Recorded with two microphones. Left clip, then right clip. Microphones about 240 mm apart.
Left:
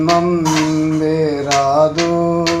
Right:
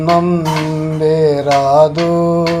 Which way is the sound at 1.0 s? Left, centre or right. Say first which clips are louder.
Right 5 dB; right.